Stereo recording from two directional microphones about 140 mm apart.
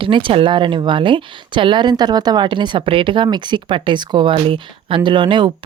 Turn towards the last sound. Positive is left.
turn(degrees=-35)  # may be behind; listen again after turning